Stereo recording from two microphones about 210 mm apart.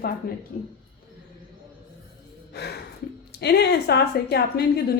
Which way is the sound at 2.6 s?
50° left (ahead or behind).